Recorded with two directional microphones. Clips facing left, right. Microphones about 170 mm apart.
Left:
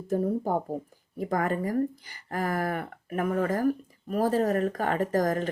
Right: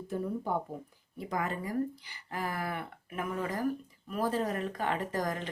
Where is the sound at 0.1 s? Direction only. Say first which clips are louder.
Left 7 dB; 40° left (ahead or behind).